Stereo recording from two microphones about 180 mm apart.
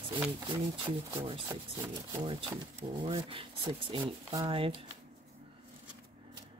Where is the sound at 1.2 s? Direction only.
30° right (ahead or behind).